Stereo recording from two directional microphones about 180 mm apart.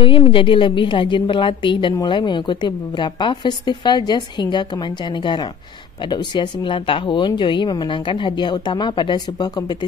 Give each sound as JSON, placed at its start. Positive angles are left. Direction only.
{"t": 0.0, "sound": "a woman's voice", "side_deg": 30}